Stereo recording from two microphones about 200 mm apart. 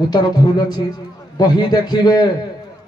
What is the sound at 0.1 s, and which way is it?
A man's voice, 20° left (ahead or behind).